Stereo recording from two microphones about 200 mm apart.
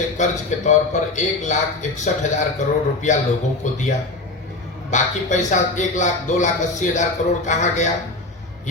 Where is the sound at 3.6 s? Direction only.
35° left (ahead or behind).